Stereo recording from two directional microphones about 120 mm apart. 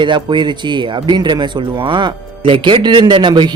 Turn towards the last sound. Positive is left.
turn(degrees=-40)  # may be behind; listen again after turning